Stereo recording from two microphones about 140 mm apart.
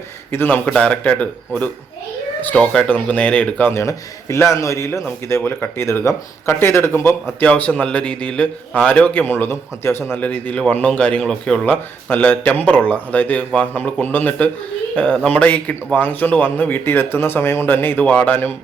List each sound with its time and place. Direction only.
0.3 s speech: 15° left (ahead or behind)